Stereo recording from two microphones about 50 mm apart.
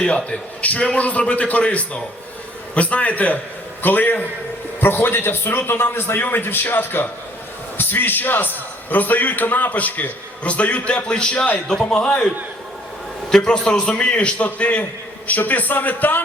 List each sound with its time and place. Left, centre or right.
0.3 s a man's voice: left
13.3 s a man's voice: centre; by 16.2 s left